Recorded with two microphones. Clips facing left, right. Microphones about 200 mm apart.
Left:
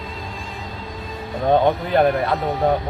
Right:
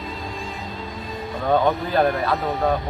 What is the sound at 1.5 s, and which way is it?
Speech, 20° left (ahead or behind).